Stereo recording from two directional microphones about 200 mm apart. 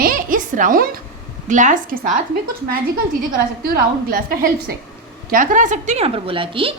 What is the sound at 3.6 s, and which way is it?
A woman's voice, 50° right (ahead or behind).